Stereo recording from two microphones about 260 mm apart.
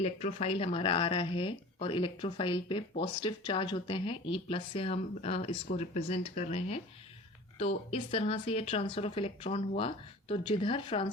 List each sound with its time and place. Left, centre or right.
0.0 s speech: left